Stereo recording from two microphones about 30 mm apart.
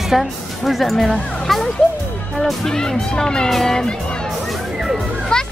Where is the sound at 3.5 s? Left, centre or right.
Centre.